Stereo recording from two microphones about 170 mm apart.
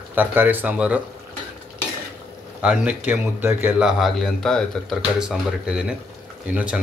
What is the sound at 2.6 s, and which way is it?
Speech, 5° right (ahead or behind).